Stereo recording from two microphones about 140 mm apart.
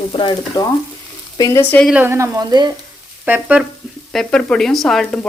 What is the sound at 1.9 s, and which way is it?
Frying, 10° right (ahead or behind).